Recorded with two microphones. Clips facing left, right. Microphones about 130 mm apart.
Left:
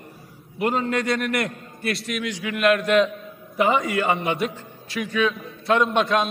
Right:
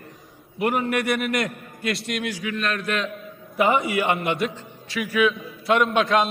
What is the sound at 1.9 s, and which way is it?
A man's voice, centre (ahead or behind).